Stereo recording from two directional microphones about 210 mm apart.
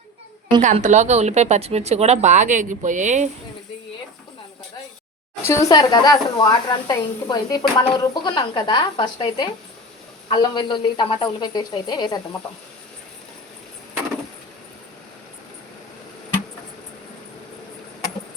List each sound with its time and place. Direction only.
0.6 s a woman's voice: 35° right (ahead or behind)
5.5 s a woman's voice: 15° left (ahead or behind)